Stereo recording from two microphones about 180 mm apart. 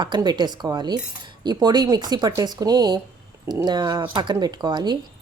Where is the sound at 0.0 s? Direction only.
25° right (ahead or behind).